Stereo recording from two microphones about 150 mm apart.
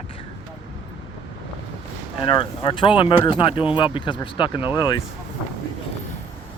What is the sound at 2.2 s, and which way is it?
Speech, 35° left (ahead or behind).